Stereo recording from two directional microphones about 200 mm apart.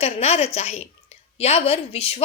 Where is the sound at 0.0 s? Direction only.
30° left (ahead or behind).